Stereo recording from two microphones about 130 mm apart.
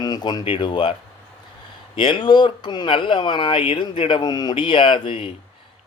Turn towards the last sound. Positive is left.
turn(degrees=45)  # may be behind; listen again after turning